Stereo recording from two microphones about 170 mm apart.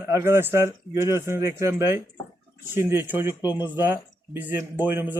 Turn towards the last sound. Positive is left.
turn(degrees=-10)  # may be behind; listen again after turning